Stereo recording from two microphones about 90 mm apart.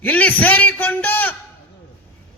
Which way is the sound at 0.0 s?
15° left (ahead or behind).